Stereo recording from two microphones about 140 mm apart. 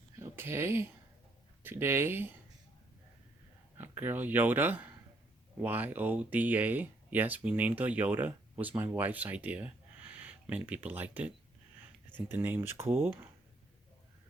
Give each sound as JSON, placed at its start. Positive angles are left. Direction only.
{"t": 0.2, "sound": "speech", "side_deg": -15}
{"t": 3.8, "sound": "speech", "side_deg": -15}